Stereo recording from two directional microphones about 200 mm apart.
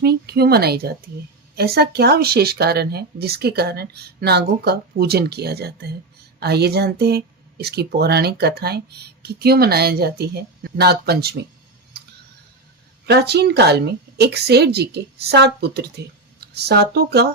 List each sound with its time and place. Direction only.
0.0 s speech: 55° right (ahead or behind)
13.1 s a woman's voice: 55° right (ahead or behind)